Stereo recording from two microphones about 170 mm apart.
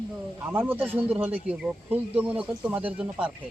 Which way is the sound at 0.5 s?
10° right (ahead or behind).